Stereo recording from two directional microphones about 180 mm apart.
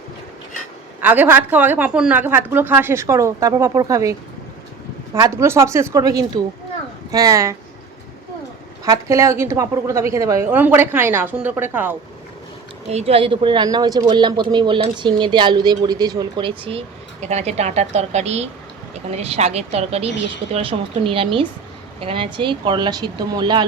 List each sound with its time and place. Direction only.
1.0 s a woman's voice: 10° right (ahead or behind)
8.8 s a woman's voice: 15° right (ahead or behind)
12.9 s a woman's voice: 35° right (ahead or behind)